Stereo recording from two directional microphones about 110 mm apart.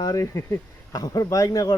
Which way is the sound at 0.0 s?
35° left (ahead or behind).